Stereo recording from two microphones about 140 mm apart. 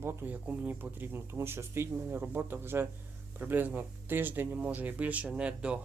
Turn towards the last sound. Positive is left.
turn(degrees=-10)  # may be behind; listen again after turning